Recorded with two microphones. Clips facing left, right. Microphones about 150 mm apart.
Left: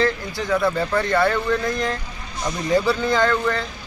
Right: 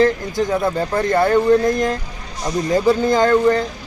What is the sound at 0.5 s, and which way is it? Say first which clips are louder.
Speech: left 2 dB; 20° right (ahead or behind).